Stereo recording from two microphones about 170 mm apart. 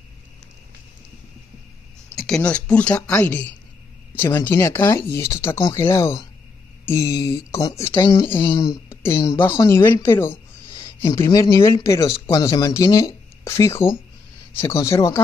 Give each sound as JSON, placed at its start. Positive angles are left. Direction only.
{"t": 2.1, "sound": "speech", "side_deg": 0}